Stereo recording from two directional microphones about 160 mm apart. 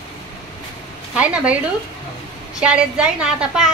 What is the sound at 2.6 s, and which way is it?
A woman's voice, 5° right (ahead or behind).